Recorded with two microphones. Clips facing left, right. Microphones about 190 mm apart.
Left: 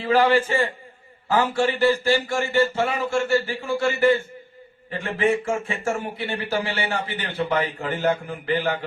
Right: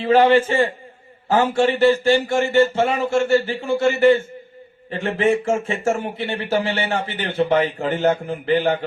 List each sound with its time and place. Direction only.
0.0 s speech: 25° right (ahead or behind)